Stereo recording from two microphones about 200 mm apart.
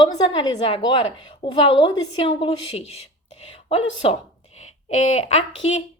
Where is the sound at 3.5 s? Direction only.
30° left (ahead or behind).